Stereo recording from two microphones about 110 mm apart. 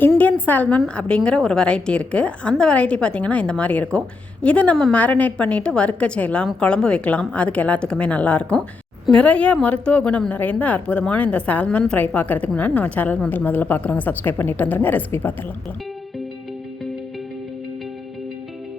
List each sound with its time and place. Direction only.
0.2 s a woman's voice: 15° left (ahead or behind)